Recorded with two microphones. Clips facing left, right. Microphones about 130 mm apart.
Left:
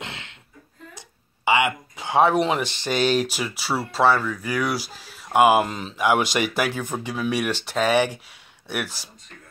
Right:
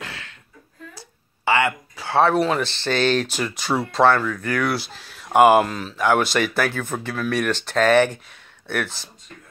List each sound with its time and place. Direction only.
0.0 s a sound: 20° left (ahead or behind)
0.9 s speech: 15° left (ahead or behind)
5.7 s speech: 20° left (ahead or behind)